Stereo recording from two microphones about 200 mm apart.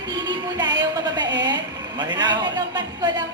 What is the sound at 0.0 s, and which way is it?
Music, 20° right (ahead or behind).